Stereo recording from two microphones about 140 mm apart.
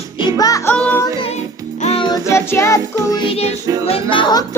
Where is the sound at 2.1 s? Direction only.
20° left (ahead or behind).